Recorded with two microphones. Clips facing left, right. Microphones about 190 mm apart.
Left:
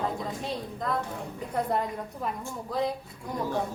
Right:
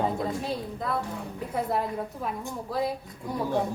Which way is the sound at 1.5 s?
5° right (ahead or behind).